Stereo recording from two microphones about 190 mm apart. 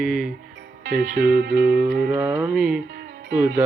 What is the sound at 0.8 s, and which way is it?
Speech, 50° right (ahead or behind).